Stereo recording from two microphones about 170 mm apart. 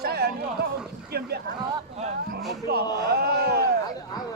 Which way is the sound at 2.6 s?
65° right (ahead or behind).